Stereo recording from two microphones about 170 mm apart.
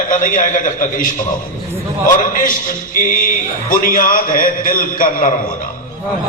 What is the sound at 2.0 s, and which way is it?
A man's voice, 55° left (ahead or behind).